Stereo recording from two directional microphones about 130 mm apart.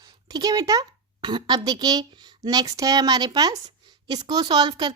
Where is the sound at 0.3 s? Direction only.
30° right (ahead or behind).